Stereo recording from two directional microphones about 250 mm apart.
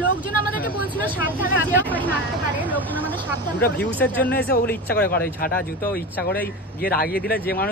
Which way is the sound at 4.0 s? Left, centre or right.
Centre.